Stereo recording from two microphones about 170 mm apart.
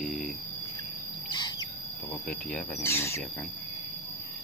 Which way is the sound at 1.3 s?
25° left (ahead or behind).